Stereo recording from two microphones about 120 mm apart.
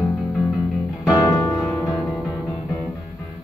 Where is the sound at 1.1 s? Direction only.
25° left (ahead or behind).